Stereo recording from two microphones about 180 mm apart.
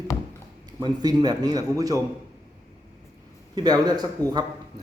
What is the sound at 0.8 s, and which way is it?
Speech, 20° right (ahead or behind).